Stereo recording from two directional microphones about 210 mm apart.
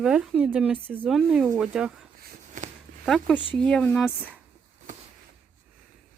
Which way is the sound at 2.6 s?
35° right (ahead or behind).